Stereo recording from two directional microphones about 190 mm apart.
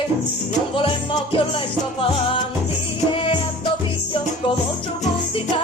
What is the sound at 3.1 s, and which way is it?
Music, 25° left (ahead or behind).